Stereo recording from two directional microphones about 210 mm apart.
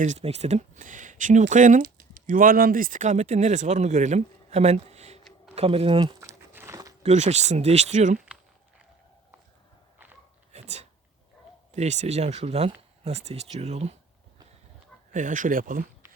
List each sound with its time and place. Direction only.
0.0 s speech: 35° right (ahead or behind)
5.5 s crumpling: 30° right (ahead or behind)
7.0 s speech: 35° right (ahead or behind)
10.5 s a sound: 30° right (ahead or behind)
11.7 s speech: 30° right (ahead or behind)
15.1 s speech: 40° right (ahead or behind)